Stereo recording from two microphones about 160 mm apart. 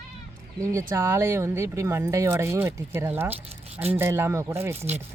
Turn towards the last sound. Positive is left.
turn(degrees=-15)  # may be behind; listen again after turning